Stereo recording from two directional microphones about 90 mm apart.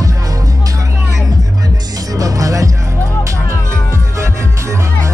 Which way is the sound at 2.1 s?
40° right (ahead or behind).